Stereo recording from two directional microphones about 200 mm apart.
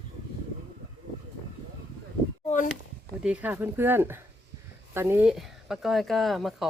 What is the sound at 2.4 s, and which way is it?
Speech, 40° left (ahead or behind).